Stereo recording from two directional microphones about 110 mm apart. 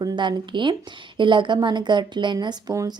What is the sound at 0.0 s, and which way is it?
A woman's voice, 45° right (ahead or behind).